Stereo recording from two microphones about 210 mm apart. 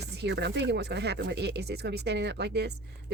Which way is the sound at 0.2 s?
55° right (ahead or behind).